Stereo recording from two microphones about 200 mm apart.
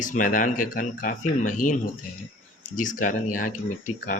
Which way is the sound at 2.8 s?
40° left (ahead or behind).